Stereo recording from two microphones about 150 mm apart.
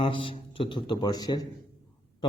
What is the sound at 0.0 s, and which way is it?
A man's voice, 35° left (ahead or behind).